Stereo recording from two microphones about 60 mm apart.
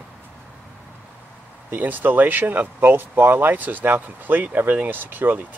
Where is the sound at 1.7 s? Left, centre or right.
Right.